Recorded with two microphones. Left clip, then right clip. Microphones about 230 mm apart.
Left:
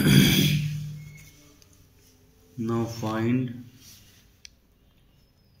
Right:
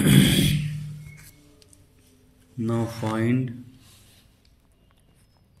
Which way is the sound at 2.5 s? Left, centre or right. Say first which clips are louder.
Right 1 dB; right.